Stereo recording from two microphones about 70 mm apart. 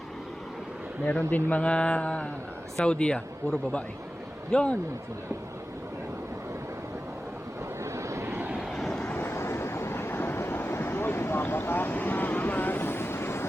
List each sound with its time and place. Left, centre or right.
1.0 s speech: left
7.9 s vehicle: right
8.7 s vehicle: centre
9.0 s vehicle: left